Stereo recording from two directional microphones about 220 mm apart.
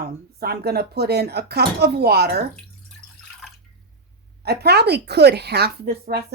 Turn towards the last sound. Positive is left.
turn(degrees=-45)  # may be behind; listen again after turning